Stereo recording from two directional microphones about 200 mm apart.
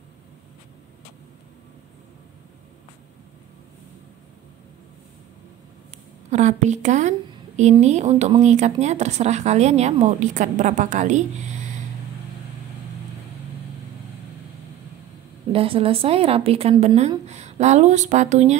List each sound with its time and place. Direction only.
6.3 s a woman's voice: 35° right (ahead or behind)
15.5 s a woman's voice: 30° right (ahead or behind)